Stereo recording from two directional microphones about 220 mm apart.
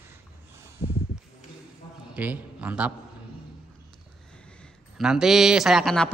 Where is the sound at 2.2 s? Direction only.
5° right (ahead or behind).